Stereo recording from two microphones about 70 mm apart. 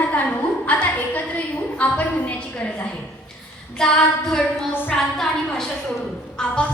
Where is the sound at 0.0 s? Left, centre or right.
Left.